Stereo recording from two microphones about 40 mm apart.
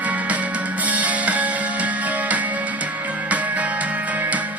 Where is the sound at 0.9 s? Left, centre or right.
Right.